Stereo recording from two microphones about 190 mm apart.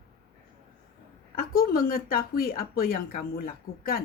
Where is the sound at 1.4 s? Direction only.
50° left (ahead or behind).